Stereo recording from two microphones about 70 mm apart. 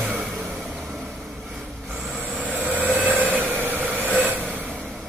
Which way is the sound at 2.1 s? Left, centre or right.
Right.